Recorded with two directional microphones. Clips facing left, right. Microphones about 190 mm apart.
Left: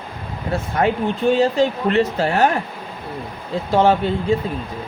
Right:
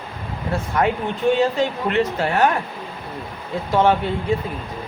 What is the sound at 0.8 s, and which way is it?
Speech, 25° left (ahead or behind).